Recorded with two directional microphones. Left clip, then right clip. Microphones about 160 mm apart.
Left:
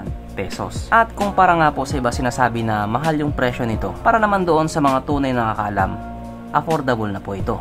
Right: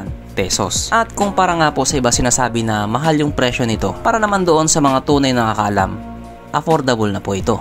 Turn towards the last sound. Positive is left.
turn(degrees=-30)  # may be behind; listen again after turning